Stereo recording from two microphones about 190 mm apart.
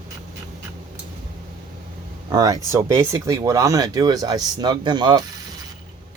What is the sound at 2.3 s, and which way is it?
Speech, 20° right (ahead or behind).